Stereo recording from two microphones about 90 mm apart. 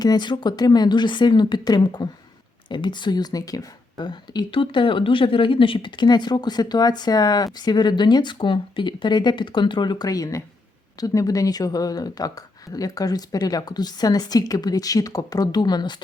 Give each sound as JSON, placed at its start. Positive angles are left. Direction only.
{"t": 0.0, "sound": "speech", "side_deg": 50}
{"t": 4.0, "sound": "speech", "side_deg": 55}